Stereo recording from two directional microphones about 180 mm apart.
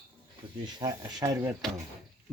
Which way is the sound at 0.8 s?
20° right (ahead or behind).